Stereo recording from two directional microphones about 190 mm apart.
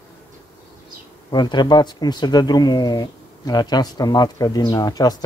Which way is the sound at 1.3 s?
20° left (ahead or behind).